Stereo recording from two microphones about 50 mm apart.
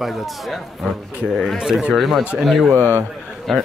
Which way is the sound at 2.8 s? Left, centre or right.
Right.